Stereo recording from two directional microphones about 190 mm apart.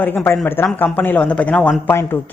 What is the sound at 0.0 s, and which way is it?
Speech, 10° left (ahead or behind).